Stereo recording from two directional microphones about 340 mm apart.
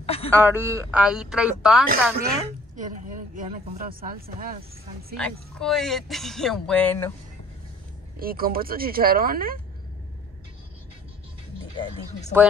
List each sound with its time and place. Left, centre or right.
0.0 s a sound: centre
0.3 s speech: centre
2.1 s a woman's voice: right
5.1 s speech: centre
8.2 s speech: right
11.7 s speech: centre